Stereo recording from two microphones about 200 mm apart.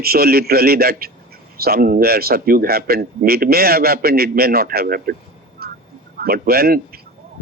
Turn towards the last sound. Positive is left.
turn(degrees=-50)  # may be behind; listen again after turning